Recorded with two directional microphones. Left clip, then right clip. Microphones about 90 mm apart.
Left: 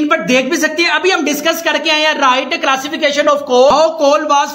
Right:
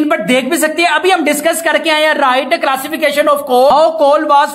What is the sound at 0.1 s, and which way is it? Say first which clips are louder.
Speech: even; 40° right (ahead or behind).